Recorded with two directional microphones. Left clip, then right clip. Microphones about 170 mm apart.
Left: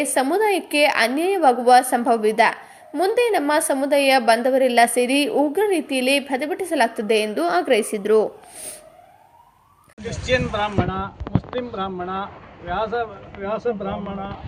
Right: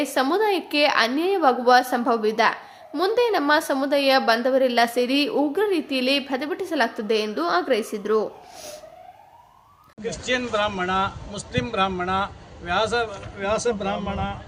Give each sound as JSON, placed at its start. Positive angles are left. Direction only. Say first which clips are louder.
{"t": 0.0, "sound": "a woman's voice", "louder": "left 2 dB", "side_deg": 5}
{"t": 10.0, "sound": "speech", "louder": "left 3 dB", "side_deg": -30}
{"t": 10.8, "sound": "speech", "louder": "right 4 dB", "side_deg": -15}